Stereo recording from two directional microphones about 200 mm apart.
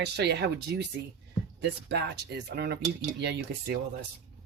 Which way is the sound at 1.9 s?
55° right (ahead or behind).